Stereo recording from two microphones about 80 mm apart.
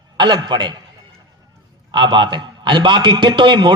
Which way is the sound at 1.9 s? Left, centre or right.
Right.